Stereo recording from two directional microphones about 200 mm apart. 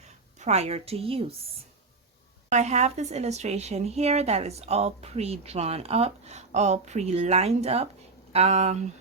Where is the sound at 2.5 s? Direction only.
35° right (ahead or behind).